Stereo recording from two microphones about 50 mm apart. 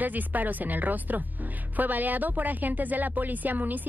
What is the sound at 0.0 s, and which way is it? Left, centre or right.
A woman's voice, right.